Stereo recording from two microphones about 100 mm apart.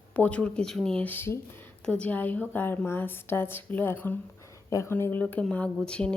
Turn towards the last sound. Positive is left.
turn(degrees=10)  # may be behind; listen again after turning